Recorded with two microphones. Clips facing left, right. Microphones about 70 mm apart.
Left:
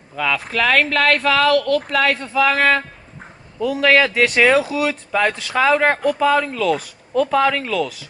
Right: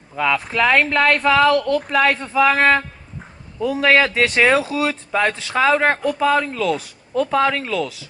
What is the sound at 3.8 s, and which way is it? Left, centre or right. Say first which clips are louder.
Speech: left 1 dB; centre.